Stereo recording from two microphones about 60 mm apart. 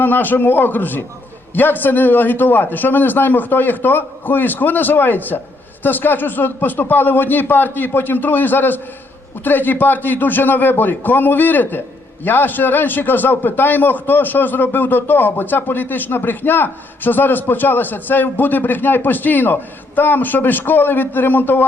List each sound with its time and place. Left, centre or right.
0.0 s a man's voice: left